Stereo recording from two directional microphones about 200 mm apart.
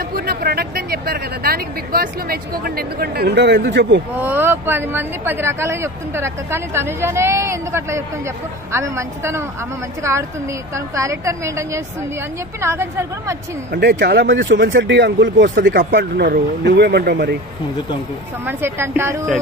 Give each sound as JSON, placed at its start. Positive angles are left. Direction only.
{"t": 0.1, "sound": "speech", "side_deg": -50}
{"t": 4.2, "sound": "speech", "side_deg": -10}
{"t": 10.7, "sound": "speech", "side_deg": -15}
{"t": 13.7, "sound": "speech", "side_deg": -60}
{"t": 15.4, "sound": "speech", "side_deg": -50}
{"t": 18.4, "sound": "speech", "side_deg": -10}